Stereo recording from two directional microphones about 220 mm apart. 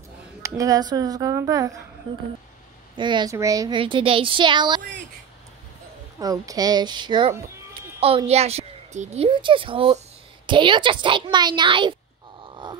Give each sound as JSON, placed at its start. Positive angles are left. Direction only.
{"t": 0.4, "sound": "speech", "side_deg": -15}
{"t": 3.0, "sound": "speech", "side_deg": -20}
{"t": 6.1, "sound": "a woman's voice", "side_deg": -15}
{"t": 12.4, "sound": "a sound", "side_deg": -20}